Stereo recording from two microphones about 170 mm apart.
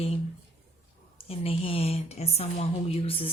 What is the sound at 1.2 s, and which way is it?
A woman's voice, 35° left (ahead or behind).